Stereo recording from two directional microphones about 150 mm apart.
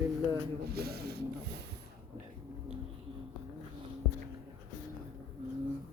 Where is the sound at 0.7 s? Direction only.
90° right.